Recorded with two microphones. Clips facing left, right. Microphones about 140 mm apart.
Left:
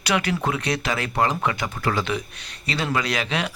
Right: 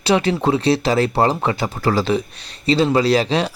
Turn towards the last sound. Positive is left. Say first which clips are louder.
# right 9 dB
turn(degrees=-30)  # may be behind; listen again after turning